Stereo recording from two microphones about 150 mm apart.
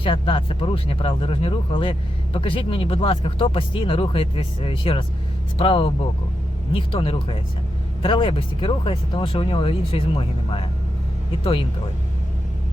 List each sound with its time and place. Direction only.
0.0 s speech: 35° left (ahead or behind)